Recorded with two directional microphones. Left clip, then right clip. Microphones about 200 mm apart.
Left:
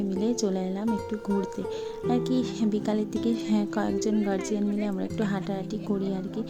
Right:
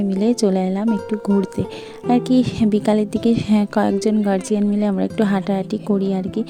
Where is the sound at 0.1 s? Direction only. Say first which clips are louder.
Right 10 dB; 40° right (ahead or behind).